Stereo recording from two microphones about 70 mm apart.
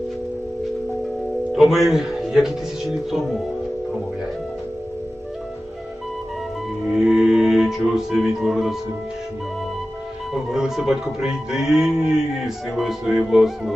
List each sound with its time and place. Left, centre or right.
1.5 s speech: centre
6.9 s music: centre
10.3 s speech: centre